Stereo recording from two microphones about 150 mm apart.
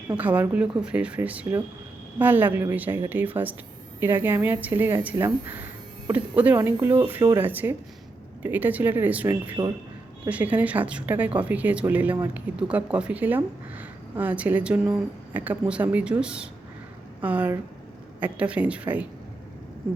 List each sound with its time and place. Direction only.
0.2 s speech: 10° right (ahead or behind)
9.3 s speech: 25° right (ahead or behind)
10.2 s speech: 10° right (ahead or behind)